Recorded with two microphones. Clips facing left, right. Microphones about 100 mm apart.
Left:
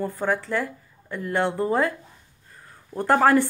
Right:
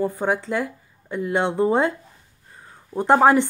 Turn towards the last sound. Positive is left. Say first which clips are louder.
# right 3 dB
turn(degrees=-20)  # may be behind; listen again after turning